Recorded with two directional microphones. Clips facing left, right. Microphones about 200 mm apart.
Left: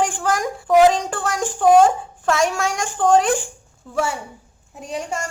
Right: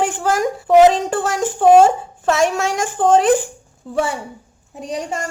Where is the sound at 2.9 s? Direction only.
20° right (ahead or behind).